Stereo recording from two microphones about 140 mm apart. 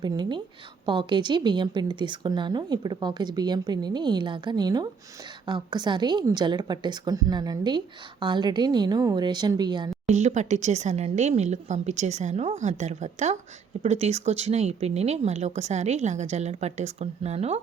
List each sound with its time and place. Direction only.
0.0 s speech: 30° right (ahead or behind)
10.1 s a woman's voice: 55° right (ahead or behind)